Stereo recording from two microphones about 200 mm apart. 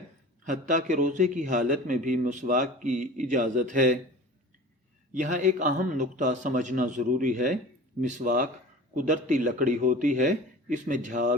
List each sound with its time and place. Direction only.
0.4 s a man's voice: 40° right (ahead or behind)
5.1 s a man's voice: 40° right (ahead or behind)